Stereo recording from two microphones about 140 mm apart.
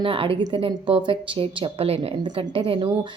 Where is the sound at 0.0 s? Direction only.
40° right (ahead or behind).